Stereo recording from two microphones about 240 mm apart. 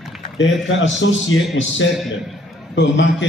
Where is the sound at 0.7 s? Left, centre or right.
Left.